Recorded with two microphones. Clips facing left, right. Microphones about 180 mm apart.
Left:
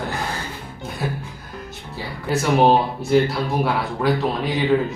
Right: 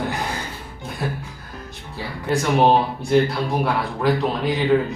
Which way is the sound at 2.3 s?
5° left (ahead or behind).